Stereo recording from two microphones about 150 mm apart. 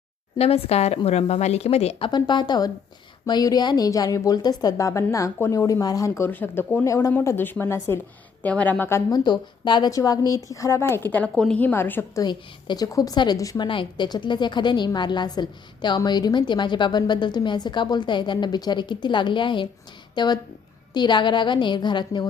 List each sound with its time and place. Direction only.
0.3 s speech: 40° left (ahead or behind)
2.0 s a woman's voice: 30° left (ahead or behind)
12.2 s a woman's voice: 30° left (ahead or behind)